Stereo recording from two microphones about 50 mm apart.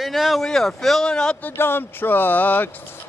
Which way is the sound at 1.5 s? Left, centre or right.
Left.